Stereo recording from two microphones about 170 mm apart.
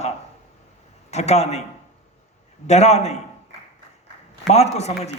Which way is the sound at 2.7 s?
40° left (ahead or behind).